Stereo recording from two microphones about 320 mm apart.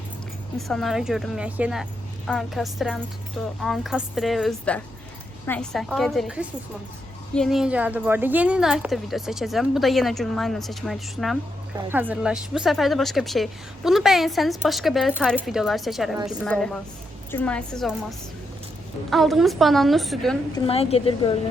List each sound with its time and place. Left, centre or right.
0.7 s speech: centre
19.1 s speech: centre
20.7 s a woman's voice: centre